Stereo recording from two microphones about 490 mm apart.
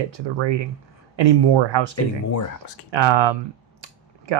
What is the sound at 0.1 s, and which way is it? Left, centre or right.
Speech, right.